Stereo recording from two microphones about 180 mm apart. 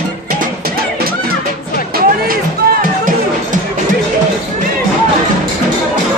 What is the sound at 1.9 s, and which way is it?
Music, 55° right (ahead or behind).